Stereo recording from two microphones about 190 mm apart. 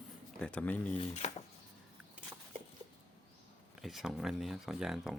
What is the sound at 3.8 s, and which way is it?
Speech, centre (ahead or behind).